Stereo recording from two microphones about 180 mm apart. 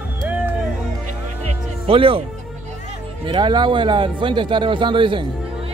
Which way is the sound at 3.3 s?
25° right (ahead or behind).